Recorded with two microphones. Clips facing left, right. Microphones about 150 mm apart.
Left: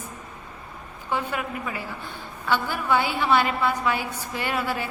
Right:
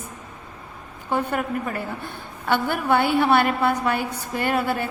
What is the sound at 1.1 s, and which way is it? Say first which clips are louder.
A woman's voice: right 4 dB; 50° right (ahead or behind).